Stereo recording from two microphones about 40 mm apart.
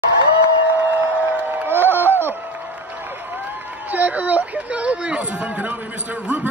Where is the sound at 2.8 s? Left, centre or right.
Right.